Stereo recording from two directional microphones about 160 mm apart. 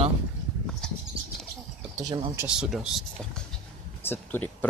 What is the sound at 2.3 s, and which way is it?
Speech, 5° right (ahead or behind).